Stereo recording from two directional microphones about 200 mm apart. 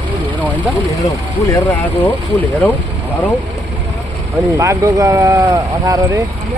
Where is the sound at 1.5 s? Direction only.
10° left (ahead or behind).